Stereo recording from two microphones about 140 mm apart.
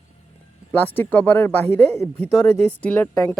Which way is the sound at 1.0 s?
15° left (ahead or behind).